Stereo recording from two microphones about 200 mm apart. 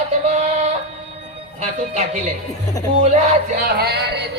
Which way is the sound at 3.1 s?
35° right (ahead or behind).